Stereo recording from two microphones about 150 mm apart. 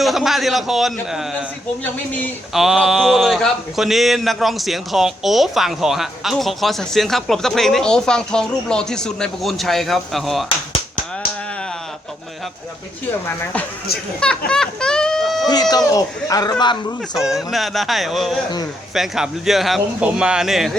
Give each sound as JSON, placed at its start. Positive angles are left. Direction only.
{"t": 0.0, "sound": "speech", "side_deg": 0}
{"t": 2.5, "sound": "speech", "side_deg": 0}
{"t": 13.2, "sound": "speech", "side_deg": 10}
{"t": 15.9, "sound": "speech", "side_deg": 25}
{"t": 17.3, "sound": "speech", "side_deg": 0}